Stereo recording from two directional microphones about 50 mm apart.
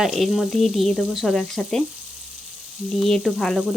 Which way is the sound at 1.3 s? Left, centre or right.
Centre.